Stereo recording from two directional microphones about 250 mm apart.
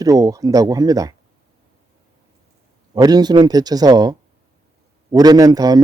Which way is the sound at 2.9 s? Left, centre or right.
Centre.